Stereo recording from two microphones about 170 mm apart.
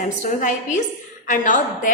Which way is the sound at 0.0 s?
50° left (ahead or behind).